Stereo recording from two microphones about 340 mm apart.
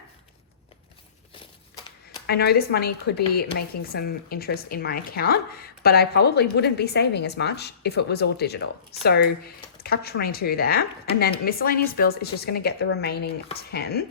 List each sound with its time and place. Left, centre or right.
2.2 s speech: left